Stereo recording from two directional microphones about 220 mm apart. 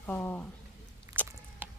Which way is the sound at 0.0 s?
10° left (ahead or behind).